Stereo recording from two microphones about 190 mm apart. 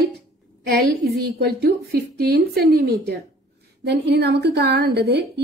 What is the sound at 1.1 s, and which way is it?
A woman's voice, 60° right (ahead or behind).